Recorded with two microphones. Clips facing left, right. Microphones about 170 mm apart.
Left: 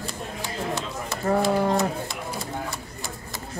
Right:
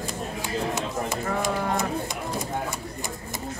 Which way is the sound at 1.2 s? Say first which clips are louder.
Left 8 dB; 35° left (ahead or behind).